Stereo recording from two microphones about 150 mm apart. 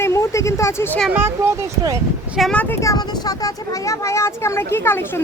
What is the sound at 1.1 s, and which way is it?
Speech, 15° right (ahead or behind).